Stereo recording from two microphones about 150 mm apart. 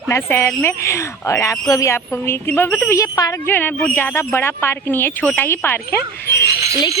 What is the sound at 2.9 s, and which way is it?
Speech, 25° left (ahead or behind).